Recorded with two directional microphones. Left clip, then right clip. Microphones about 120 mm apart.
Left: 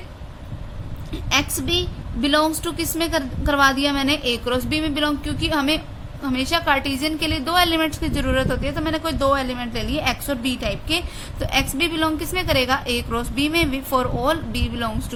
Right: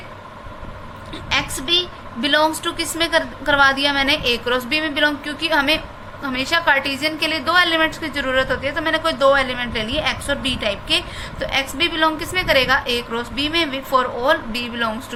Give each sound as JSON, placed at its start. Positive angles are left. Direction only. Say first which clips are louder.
{"t": 1.1, "sound": "a sound", "louder": "even", "side_deg": 50}
{"t": 2.2, "sound": "a woman's voice", "louder": "right 2 dB", "side_deg": 50}
{"t": 11.3, "sound": "a woman's voice", "louder": "right 1 dB", "side_deg": 65}
{"t": 14.3, "sound": "a woman's voice", "louder": "right 4 dB", "side_deg": 50}